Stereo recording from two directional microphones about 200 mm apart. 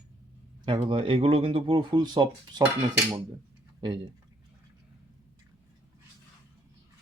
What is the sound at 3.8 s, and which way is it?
Speech, 20° right (ahead or behind).